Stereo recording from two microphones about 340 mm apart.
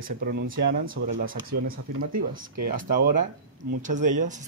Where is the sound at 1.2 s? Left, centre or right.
Right.